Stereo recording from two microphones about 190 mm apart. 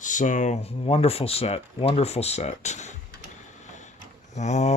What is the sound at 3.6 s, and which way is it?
Mechanisms, 40° left (ahead or behind).